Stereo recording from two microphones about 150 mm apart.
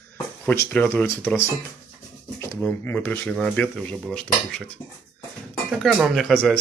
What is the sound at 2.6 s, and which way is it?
Speech, 10° left (ahead or behind).